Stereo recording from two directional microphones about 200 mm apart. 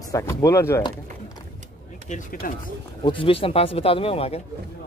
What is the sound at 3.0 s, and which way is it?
Speech, 25° left (ahead or behind).